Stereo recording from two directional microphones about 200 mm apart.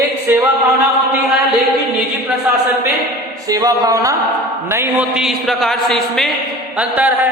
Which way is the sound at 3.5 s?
15° right (ahead or behind).